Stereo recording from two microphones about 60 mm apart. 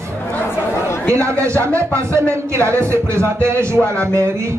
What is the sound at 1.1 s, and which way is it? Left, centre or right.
Speech, right.